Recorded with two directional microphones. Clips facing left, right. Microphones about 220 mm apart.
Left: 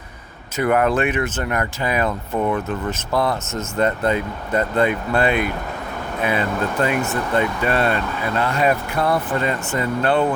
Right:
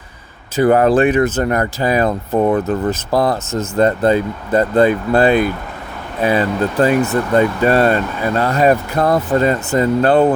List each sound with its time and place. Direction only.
0.5 s speech: 30° right (ahead or behind)